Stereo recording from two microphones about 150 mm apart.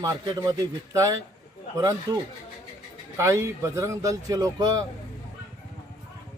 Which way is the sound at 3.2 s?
20° right (ahead or behind).